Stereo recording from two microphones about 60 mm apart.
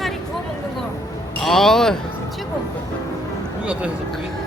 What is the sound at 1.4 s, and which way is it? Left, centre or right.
Speech, centre.